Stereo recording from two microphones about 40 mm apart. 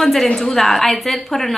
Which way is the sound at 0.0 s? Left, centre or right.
Centre.